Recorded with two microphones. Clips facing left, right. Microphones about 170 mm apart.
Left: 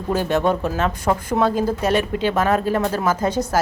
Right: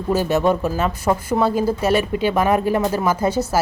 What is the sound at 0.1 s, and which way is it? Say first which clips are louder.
Speech: right 2 dB; 5° right (ahead or behind).